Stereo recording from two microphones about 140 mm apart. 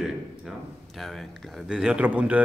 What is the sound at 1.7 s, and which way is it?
Speech, 5° right (ahead or behind).